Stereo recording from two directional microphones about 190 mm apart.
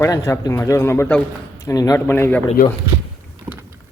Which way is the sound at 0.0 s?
15° left (ahead or behind).